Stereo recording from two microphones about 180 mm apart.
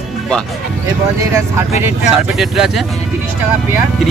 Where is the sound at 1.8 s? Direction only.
5° right (ahead or behind).